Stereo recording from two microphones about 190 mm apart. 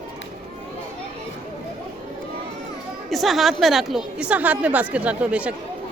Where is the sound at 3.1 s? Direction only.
Centre (ahead or behind).